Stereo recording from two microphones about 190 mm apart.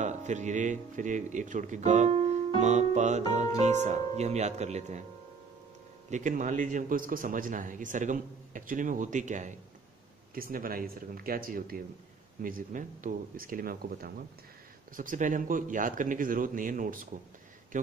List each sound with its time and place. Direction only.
0.0 s a man's voice: 40° right (ahead or behind)
6.0 s a man's voice: 40° right (ahead or behind)